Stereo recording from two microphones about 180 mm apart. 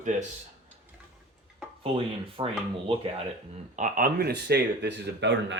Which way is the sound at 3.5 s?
45° right (ahead or behind).